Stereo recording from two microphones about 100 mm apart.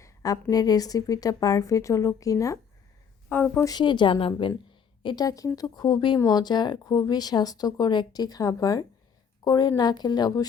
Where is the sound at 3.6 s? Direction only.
45° left (ahead or behind).